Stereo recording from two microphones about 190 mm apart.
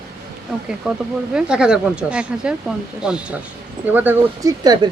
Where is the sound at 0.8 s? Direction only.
5° right (ahead or behind).